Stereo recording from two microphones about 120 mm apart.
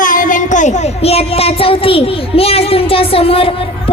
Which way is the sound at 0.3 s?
90° left.